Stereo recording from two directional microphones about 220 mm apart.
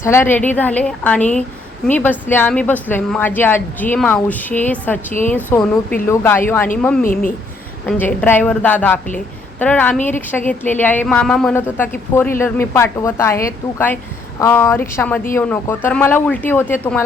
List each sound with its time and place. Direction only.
0.0 s speech: 10° left (ahead or behind)
7.0 s speech: 40° left (ahead or behind)
7.9 s speech: 10° left (ahead or behind)